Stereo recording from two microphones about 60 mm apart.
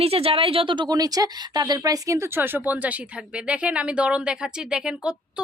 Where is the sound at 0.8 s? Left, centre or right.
Right.